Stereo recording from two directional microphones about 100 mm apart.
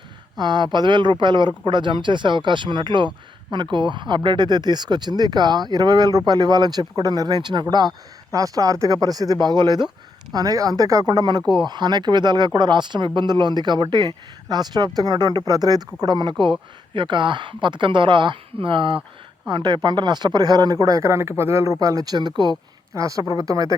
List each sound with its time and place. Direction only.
0.3 s speech: 45° right (ahead or behind)
23.0 s speech: 35° right (ahead or behind)